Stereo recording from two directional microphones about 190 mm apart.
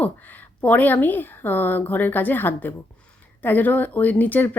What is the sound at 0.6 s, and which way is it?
Speech, 10° left (ahead or behind).